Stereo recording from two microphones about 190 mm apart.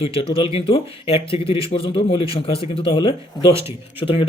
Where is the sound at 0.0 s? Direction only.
30° left (ahead or behind).